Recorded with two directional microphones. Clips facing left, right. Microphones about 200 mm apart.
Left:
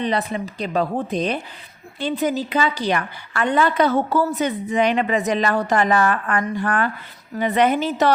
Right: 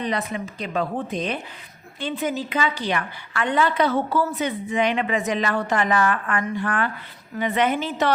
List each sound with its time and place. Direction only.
0.0 s a woman's voice: 30° left (ahead or behind)